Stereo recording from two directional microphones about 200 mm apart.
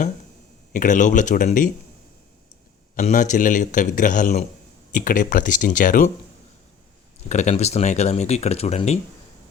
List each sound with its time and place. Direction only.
0.7 s speech: 40° left (ahead or behind)
2.9 s speech: 40° left (ahead or behind)
7.3 s speech: 35° left (ahead or behind)